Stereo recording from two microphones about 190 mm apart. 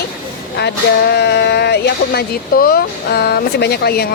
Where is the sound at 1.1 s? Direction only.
60° left (ahead or behind).